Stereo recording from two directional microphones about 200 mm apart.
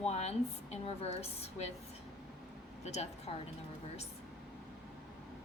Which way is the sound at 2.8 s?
35° left (ahead or behind).